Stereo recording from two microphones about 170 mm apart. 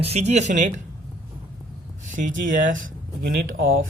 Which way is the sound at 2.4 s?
50° right (ahead or behind).